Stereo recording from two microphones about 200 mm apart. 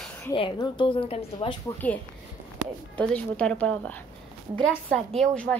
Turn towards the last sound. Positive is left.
turn(degrees=5)  # may be behind; listen again after turning